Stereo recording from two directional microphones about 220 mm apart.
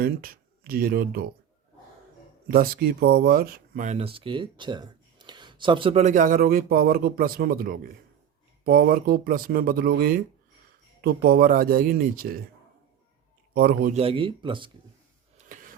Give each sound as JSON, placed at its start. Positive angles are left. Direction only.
{"t": 0.0, "sound": "speech", "side_deg": -40}
{"t": 2.5, "sound": "speech", "side_deg": -45}
{"t": 13.5, "sound": "a man's voice", "side_deg": -45}
{"t": 13.9, "sound": "speech", "side_deg": -25}
{"t": 15.4, "sound": "a sound", "side_deg": -35}